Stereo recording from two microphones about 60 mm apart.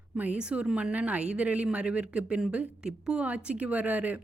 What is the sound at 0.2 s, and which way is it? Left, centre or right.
A woman's voice, right.